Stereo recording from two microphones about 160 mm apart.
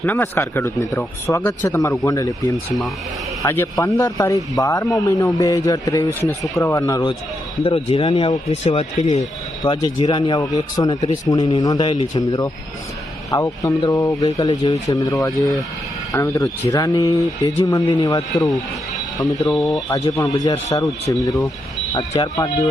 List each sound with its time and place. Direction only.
0.0 s speech: 10° left (ahead or behind)
7.6 s speech: 35° left (ahead or behind)
8.6 s speech: 40° left (ahead or behind)
9.6 s speech: 30° left (ahead or behind)